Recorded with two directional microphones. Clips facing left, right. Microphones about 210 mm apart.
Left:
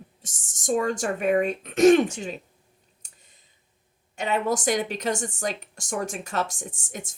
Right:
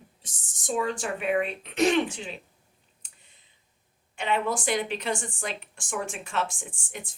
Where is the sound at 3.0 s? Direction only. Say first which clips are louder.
Left 1 dB; 40° left (ahead or behind).